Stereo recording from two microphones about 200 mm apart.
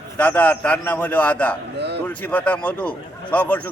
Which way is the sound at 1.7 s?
60° right (ahead or behind).